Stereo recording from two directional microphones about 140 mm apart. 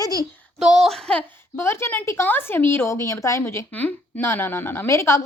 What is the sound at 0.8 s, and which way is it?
Speech, 5° left (ahead or behind).